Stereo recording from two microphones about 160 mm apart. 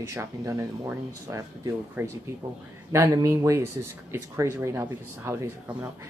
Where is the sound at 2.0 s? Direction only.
10° right (ahead or behind).